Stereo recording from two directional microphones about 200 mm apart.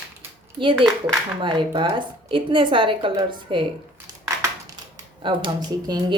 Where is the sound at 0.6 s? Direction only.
25° right (ahead or behind).